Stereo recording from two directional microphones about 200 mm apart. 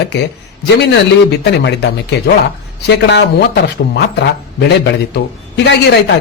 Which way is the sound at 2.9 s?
60° left (ahead or behind).